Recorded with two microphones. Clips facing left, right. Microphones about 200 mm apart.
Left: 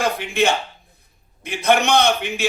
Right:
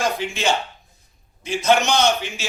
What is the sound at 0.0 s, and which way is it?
A man's voice, 60° left (ahead or behind).